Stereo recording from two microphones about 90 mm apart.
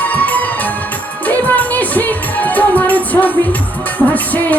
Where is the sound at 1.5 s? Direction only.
20° left (ahead or behind).